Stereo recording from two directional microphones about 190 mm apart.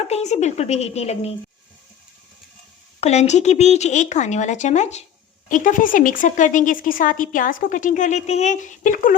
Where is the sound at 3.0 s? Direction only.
35° left (ahead or behind).